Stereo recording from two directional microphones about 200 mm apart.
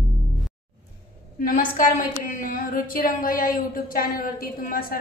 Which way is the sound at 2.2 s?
40° left (ahead or behind).